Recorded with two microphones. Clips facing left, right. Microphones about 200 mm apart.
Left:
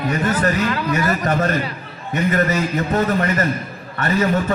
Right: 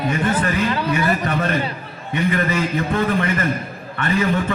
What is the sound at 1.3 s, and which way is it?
A man's voice, 40° left (ahead or behind).